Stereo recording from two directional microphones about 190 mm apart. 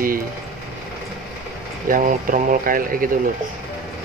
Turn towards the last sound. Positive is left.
turn(degrees=-45)  # may be behind; listen again after turning